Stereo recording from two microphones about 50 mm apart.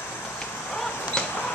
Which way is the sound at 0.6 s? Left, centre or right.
Centre.